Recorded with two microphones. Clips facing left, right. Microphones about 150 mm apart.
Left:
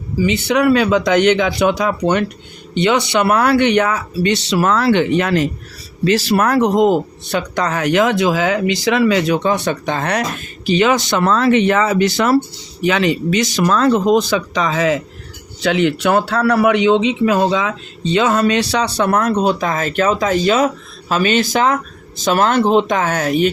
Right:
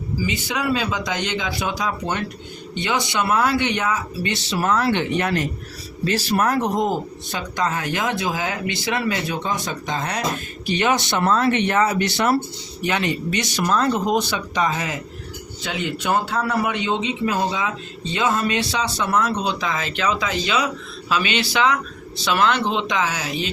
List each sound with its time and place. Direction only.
0.2 s a man's voice: 70° left (ahead or behind)
10.7 s a man's voice: 90° left; by 23.5 s 55° left (ahead or behind)